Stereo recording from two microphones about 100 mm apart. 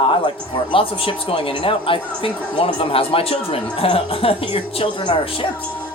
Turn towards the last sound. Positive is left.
turn(degrees=65)  # may be behind; listen again after turning